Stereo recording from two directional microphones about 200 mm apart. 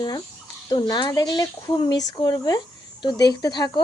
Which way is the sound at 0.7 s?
20° left (ahead or behind).